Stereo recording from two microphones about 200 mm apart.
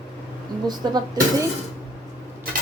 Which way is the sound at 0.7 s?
20° right (ahead or behind).